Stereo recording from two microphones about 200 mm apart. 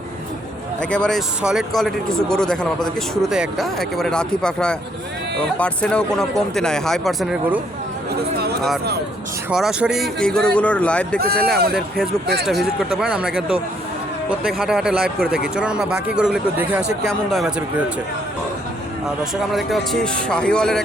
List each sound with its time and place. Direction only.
0.8 s speech: 5° left (ahead or behind)
9.5 s speech: 5° right (ahead or behind)
11.2 s speech: 50° right (ahead or behind)
12.5 s speech: centre (ahead or behind)
19.2 s speech: centre (ahead or behind)